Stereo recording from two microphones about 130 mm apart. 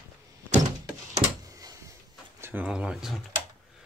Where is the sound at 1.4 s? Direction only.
25° right (ahead or behind).